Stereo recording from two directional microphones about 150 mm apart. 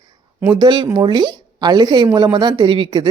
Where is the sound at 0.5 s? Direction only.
30° right (ahead or behind).